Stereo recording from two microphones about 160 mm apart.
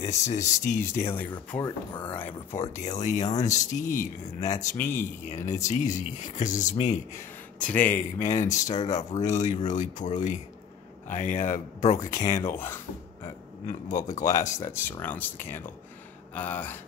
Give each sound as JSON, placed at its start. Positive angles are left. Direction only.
{"t": 0.0, "sound": "speech", "side_deg": 45}
{"t": 0.9, "sound": "speech", "side_deg": 15}
{"t": 2.7, "sound": "speech", "side_deg": 45}
{"t": 7.1, "sound": "speech", "side_deg": 10}
{"t": 8.2, "sound": "speech", "side_deg": 50}
{"t": 12.4, "sound": "speech", "side_deg": 15}
{"t": 13.7, "sound": "speech", "side_deg": 50}
{"t": 14.6, "sound": "speech", "side_deg": 15}